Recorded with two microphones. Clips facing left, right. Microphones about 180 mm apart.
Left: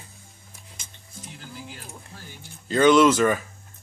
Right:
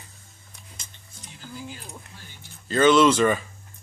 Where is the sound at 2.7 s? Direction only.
15° left (ahead or behind).